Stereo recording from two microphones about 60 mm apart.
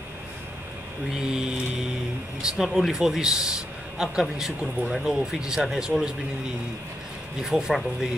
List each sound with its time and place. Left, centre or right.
1.2 s speech: centre
7.4 s speech: centre